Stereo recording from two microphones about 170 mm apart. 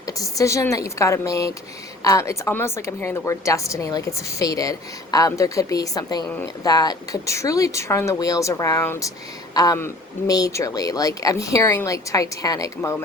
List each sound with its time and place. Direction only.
0.2 s speech: 20° left (ahead or behind)